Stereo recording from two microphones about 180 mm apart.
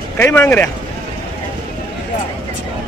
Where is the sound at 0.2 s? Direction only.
10° left (ahead or behind).